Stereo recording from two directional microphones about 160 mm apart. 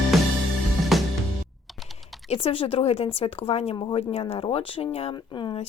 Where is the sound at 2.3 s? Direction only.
35° left (ahead or behind).